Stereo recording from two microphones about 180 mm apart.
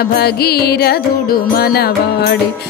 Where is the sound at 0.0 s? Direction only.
60° left (ahead or behind).